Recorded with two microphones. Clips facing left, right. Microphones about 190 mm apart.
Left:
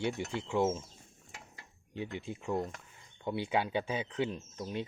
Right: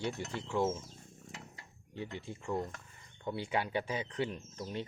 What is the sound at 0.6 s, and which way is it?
Speech, 20° left (ahead or behind).